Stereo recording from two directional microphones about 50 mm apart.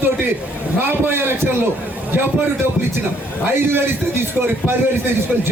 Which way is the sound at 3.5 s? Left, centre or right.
Right.